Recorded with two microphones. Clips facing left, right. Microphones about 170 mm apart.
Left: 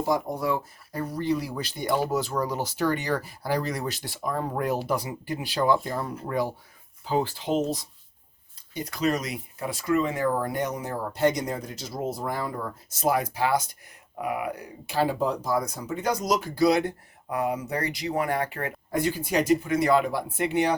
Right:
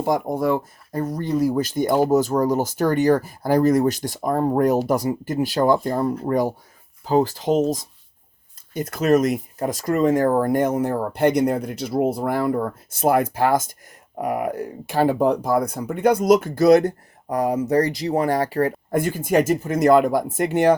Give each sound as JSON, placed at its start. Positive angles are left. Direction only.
{"t": 0.0, "sound": "speech", "side_deg": -50}
{"t": 18.9, "sound": "speech", "side_deg": -50}